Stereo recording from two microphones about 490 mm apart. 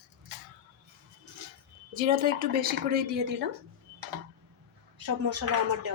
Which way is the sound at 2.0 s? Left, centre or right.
Centre.